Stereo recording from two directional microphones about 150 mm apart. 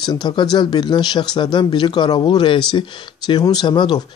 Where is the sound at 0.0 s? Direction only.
30° left (ahead or behind).